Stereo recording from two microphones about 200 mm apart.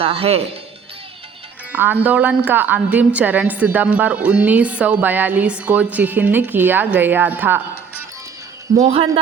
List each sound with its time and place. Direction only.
0.0 s speech: 30° right (ahead or behind)
1.7 s a woman's voice: 10° right (ahead or behind)
8.7 s speech: 30° right (ahead or behind)